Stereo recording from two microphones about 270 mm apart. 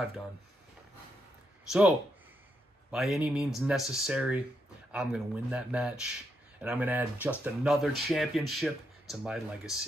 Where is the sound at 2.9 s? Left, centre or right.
Centre.